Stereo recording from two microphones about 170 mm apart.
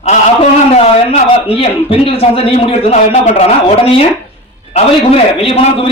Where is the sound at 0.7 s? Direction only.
35° left (ahead or behind).